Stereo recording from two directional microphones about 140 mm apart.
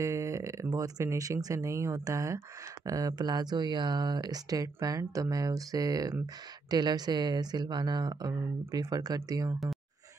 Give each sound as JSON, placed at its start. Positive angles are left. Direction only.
{"t": 0.0, "sound": "speech", "side_deg": -20}